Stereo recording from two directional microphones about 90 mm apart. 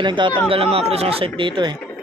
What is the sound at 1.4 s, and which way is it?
Speech, 65° right (ahead or behind).